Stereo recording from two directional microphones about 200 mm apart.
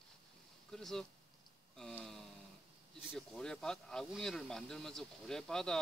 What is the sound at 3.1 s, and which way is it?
Speech, centre (ahead or behind).